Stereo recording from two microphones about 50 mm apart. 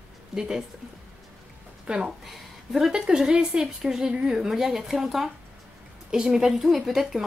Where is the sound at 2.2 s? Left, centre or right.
Centre.